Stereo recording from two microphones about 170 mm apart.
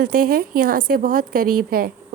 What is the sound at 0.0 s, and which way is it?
A woman's voice, 55° right (ahead or behind).